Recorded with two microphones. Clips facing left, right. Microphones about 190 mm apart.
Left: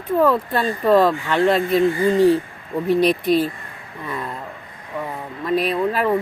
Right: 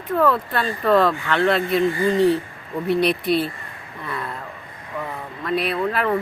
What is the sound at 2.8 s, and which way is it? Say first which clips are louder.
Speech: left 3 dB; 40° left (ahead or behind).